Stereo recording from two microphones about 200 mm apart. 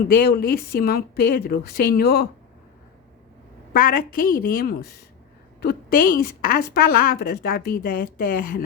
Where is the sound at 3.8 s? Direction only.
45° left (ahead or behind).